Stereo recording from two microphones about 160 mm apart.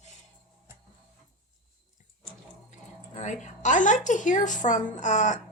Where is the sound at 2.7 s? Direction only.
50° left (ahead or behind).